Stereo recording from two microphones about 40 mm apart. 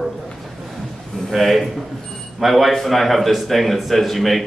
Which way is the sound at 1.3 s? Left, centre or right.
Centre.